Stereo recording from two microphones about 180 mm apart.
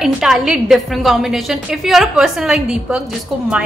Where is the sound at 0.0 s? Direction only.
Centre (ahead or behind).